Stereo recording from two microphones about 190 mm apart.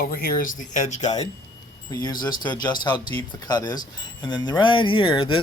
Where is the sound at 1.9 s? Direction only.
20° left (ahead or behind).